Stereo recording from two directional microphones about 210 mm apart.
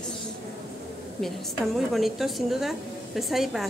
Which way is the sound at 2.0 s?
Centre (ahead or behind).